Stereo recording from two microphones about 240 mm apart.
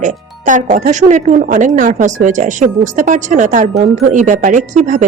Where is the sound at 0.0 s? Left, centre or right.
Right.